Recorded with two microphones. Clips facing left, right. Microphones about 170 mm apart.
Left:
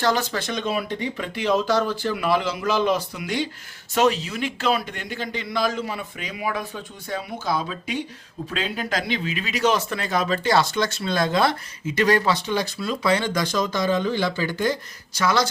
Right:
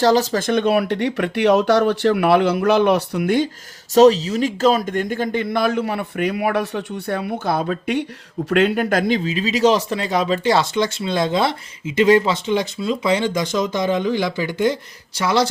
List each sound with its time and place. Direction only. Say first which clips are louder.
0.0 s speech: right 7 dB; 35° right (ahead or behind); by 3.5 s 50° right (ahead or behind)
3.9 s speech: right 9 dB; 35° right (ahead or behind); by 8.0 s 60° right (ahead or behind)
8.4 s speech: right 11 dB; 70° right (ahead or behind); by 9.2 s 50° right (ahead or behind)
9.2 s speech: right 6 dB; 30° right (ahead or behind)